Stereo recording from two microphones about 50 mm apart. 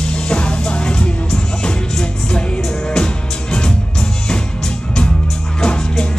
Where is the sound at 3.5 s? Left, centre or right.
Centre.